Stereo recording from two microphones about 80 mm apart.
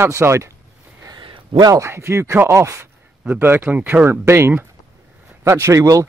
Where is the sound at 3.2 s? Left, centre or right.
Right.